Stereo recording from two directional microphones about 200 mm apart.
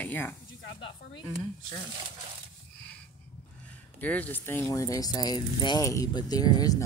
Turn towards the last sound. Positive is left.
turn(degrees=20)  # may be behind; listen again after turning